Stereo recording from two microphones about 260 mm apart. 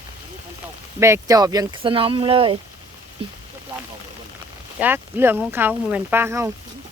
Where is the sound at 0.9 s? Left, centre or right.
Centre.